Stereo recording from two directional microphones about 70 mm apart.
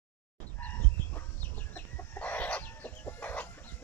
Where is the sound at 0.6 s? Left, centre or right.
Left.